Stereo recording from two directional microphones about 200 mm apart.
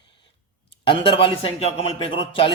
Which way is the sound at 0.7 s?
25° left (ahead or behind).